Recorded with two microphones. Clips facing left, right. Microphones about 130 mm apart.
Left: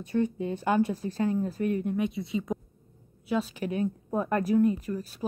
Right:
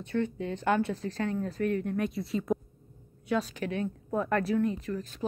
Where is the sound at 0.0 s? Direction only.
15° left (ahead or behind).